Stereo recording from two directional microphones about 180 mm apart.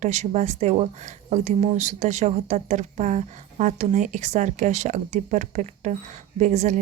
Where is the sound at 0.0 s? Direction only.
40° right (ahead or behind).